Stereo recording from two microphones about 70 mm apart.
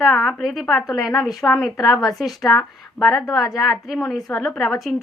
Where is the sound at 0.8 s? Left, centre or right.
Left.